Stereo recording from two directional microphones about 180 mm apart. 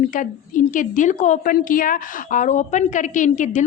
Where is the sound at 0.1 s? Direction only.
45° left (ahead or behind).